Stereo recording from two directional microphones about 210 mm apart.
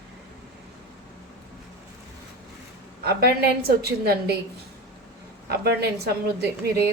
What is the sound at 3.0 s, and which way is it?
A woman's voice, 50° right (ahead or behind).